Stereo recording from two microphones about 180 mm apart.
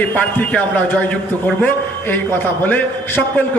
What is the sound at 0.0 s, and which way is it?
A man's voice, 10° left (ahead or behind).